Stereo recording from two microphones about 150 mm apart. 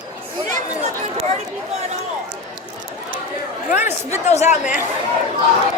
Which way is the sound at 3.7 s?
15° right (ahead or behind).